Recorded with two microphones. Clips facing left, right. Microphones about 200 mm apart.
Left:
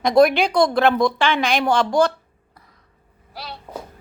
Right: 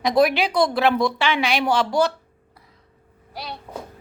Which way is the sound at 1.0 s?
50° left (ahead or behind).